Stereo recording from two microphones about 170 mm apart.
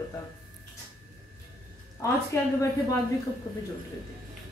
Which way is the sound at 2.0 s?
20° left (ahead or behind).